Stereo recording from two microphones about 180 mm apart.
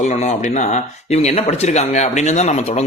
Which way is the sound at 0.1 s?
40° left (ahead or behind).